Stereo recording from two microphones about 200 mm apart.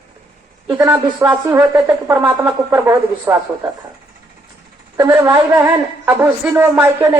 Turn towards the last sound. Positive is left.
turn(degrees=-10)  # may be behind; listen again after turning